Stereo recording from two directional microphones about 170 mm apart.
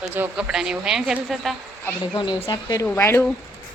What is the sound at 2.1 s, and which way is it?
Speech, 25° left (ahead or behind).